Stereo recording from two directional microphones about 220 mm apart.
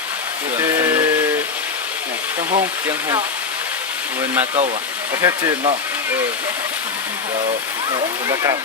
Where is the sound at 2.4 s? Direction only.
10° right (ahead or behind).